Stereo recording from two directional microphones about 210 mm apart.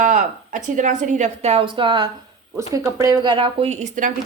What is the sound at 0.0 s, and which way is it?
A woman's voice, 35° right (ahead or behind).